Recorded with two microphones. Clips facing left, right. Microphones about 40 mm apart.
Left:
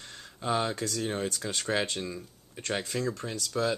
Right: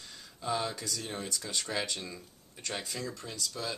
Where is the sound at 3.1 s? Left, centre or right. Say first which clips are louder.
Left 7 dB; left.